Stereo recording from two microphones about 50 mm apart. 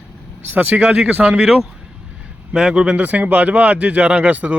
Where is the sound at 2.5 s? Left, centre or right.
Centre.